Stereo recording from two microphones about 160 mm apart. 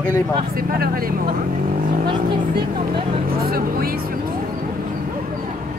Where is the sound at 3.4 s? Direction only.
70° right (ahead or behind).